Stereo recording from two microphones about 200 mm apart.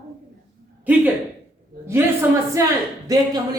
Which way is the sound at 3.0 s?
20° right (ahead or behind).